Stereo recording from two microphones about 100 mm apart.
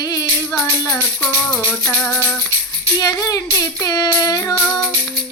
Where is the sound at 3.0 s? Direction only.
35° left (ahead or behind).